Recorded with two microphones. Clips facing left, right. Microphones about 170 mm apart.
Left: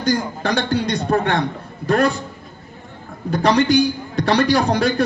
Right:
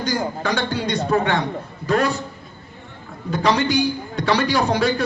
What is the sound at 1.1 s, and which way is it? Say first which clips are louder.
Speech: left 1 dB; 45° left (ahead or behind).